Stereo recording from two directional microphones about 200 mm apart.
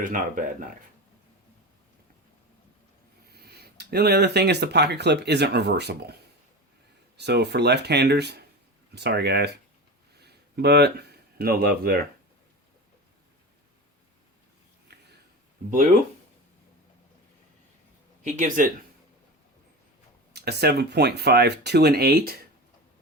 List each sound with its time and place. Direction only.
0.0 s speech: 40° right (ahead or behind)
3.2 s speech: 50° right (ahead or behind)
7.2 s speech: 55° right (ahead or behind)
18.2 s speech: 40° right (ahead or behind)
20.3 s speech: 55° right (ahead or behind)